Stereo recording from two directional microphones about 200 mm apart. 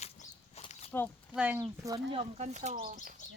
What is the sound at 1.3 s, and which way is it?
Speech, 5° right (ahead or behind).